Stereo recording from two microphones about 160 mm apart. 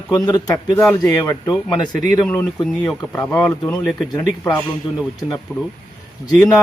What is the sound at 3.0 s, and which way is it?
Speech, 15° left (ahead or behind).